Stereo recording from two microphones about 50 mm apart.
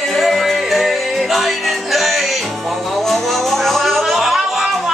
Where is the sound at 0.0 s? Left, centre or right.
Centre.